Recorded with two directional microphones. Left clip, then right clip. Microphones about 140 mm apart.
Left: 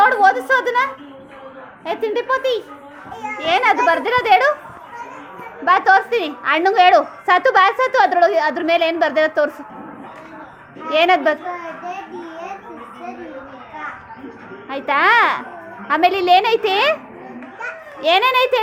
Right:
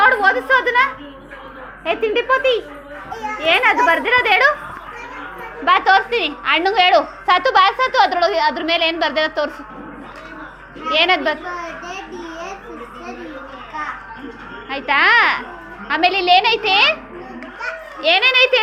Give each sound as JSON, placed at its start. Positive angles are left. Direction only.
{"t": 0.0, "sound": "a sound", "side_deg": 45}
{"t": 1.8, "sound": "speech", "side_deg": 15}
{"t": 3.2, "sound": "a child's voice", "side_deg": 40}
{"t": 5.8, "sound": "a woman's voice", "side_deg": 55}
{"t": 10.8, "sound": "a woman's voice", "side_deg": 70}
{"t": 14.7, "sound": "a woman's voice", "side_deg": 40}
{"t": 15.9, "sound": "a woman's voice", "side_deg": 65}
{"t": 18.0, "sound": "a child's voice", "side_deg": 45}